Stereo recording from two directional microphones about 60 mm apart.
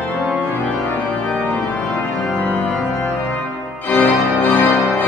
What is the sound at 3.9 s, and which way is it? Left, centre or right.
Organ, left.